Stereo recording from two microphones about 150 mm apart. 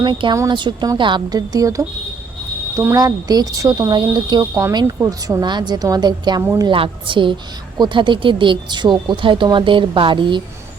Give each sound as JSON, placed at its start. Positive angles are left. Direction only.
{"t": 0.0, "sound": "speech", "side_deg": -30}
{"t": 6.4, "sound": "a woman's voice", "side_deg": -15}
{"t": 6.7, "sound": "speech", "side_deg": -35}